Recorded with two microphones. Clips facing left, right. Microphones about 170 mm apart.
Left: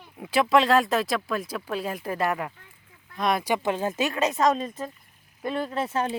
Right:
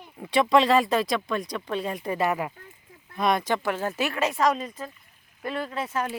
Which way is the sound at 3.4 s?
15° left (ahead or behind).